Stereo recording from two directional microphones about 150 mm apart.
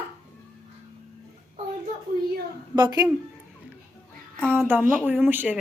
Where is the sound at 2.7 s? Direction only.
25° right (ahead or behind).